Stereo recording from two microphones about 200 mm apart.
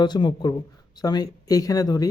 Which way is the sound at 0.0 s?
20° left (ahead or behind).